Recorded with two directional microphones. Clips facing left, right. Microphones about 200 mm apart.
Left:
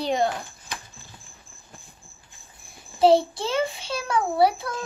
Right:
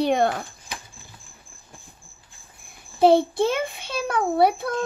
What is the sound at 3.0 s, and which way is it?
A child's voice, 55° right (ahead or behind).